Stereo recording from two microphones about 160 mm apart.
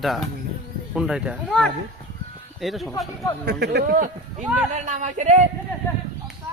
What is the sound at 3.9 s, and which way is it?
Speech, 55° right (ahead or behind).